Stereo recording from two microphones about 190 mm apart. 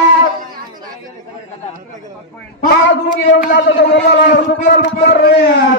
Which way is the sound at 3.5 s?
65° left (ahead or behind).